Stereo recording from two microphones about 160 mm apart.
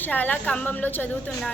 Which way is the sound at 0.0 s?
10° left (ahead or behind).